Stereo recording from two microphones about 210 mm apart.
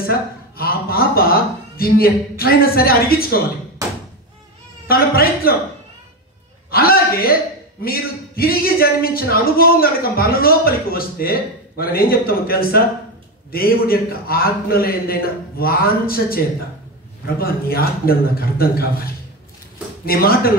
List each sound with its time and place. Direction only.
0.0 s speech: 45° left (ahead or behind)
4.8 s speech: 45° left (ahead or behind)
6.7 s a man's voice: 45° left (ahead or behind)
17.4 s speech: 45° left (ahead or behind)